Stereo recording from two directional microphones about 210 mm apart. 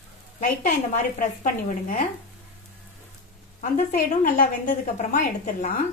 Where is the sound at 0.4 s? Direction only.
35° left (ahead or behind).